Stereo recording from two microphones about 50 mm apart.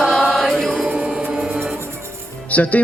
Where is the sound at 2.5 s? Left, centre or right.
Left.